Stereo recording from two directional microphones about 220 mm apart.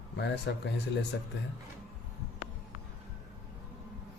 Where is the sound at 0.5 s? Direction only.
55° left (ahead or behind).